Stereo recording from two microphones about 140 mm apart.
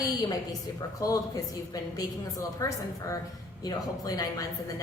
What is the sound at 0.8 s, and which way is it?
A woman's voice, 25° left (ahead or behind).